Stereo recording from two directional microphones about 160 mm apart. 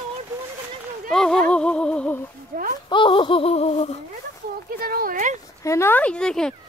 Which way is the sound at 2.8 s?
30° left (ahead or behind).